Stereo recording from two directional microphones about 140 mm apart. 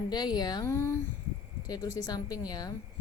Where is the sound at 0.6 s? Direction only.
20° left (ahead or behind).